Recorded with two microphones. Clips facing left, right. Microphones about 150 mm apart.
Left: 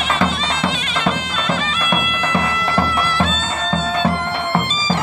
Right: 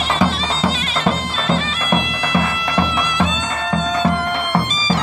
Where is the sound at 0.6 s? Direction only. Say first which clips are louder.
Right 2 dB; 35° right (ahead or behind).